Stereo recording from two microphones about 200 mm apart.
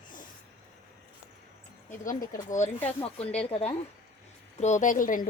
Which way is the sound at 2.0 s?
45° left (ahead or behind).